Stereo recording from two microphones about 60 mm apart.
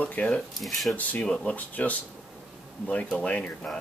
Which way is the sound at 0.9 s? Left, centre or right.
Left.